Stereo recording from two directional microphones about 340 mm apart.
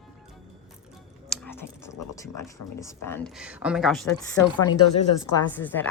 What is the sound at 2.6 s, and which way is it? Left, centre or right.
Speech, left.